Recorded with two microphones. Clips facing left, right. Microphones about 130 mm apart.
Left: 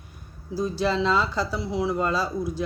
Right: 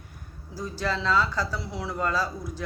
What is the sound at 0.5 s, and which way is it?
Speech, 15° left (ahead or behind).